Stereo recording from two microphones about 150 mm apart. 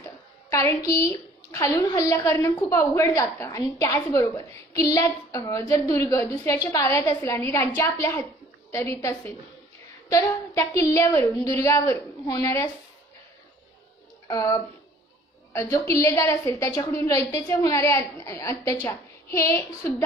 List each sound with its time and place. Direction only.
0.5 s a woman's voice: 20° left (ahead or behind)
14.2 s a woman's voice: 25° left (ahead or behind)